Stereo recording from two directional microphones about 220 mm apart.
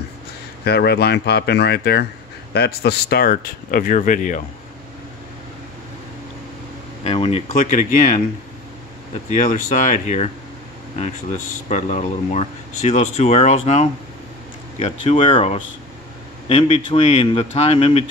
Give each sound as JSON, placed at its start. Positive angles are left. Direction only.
{"t": 0.7, "sound": "speech", "side_deg": 45}
{"t": 7.0, "sound": "a man's voice", "side_deg": 25}
{"t": 9.3, "sound": "speech", "side_deg": 35}
{"t": 11.7, "sound": "a man's voice", "side_deg": 30}